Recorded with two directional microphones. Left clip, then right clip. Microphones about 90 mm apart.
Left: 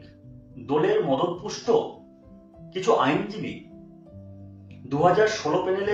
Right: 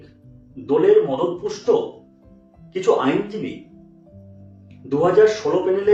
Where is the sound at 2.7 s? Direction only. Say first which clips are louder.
Right 3 dB; 20° right (ahead or behind).